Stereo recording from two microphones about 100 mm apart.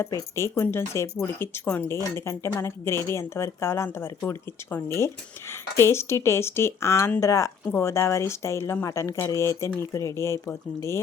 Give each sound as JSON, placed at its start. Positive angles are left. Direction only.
{"t": 0.0, "sound": "speech", "side_deg": 25}